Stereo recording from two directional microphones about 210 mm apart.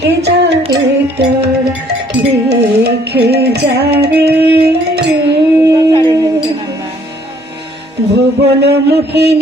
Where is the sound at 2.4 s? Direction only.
50° right (ahead or behind).